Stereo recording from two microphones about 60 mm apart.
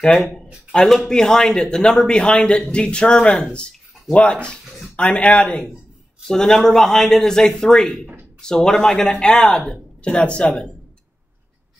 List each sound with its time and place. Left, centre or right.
0.8 s speech: centre